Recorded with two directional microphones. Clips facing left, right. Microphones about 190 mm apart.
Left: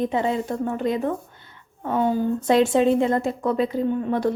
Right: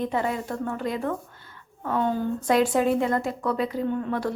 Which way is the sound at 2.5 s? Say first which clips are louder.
Left 3 dB; 25° left (ahead or behind).